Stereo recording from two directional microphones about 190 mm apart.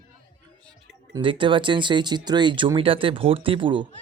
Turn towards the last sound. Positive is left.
turn(degrees=-25)  # may be behind; listen again after turning